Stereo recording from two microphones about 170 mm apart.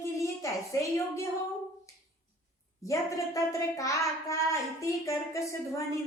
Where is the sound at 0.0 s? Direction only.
15° left (ahead or behind).